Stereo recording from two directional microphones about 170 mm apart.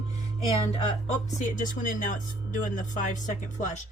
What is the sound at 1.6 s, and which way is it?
Speech, 50° left (ahead or behind).